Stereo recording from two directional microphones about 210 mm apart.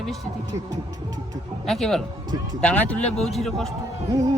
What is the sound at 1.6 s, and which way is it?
Speech, centre (ahead or behind).